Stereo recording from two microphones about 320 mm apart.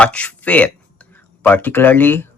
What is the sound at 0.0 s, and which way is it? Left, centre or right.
Speech, centre.